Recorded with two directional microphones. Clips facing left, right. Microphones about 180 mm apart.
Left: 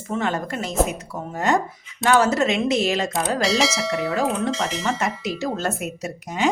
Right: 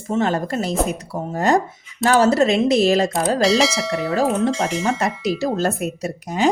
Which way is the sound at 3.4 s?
Centre (ahead or behind).